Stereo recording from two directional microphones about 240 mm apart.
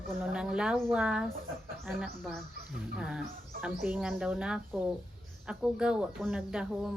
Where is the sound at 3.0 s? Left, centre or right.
Centre.